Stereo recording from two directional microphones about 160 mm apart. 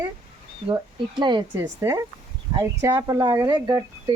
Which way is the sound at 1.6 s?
15° right (ahead or behind).